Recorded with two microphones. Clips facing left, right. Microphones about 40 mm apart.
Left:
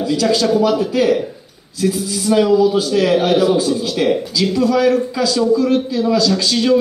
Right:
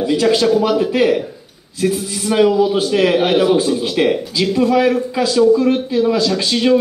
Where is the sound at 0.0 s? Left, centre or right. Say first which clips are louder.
Right 2 dB; right.